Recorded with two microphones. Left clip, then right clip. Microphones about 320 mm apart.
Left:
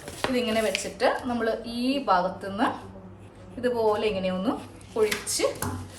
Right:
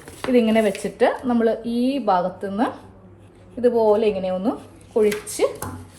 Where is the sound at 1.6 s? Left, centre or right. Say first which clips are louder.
Right 8 dB; centre.